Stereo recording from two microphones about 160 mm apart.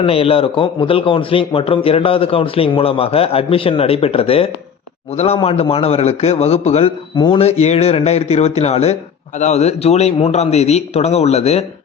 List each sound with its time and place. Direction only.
0.0 s a man's voice: 35° left (ahead or behind)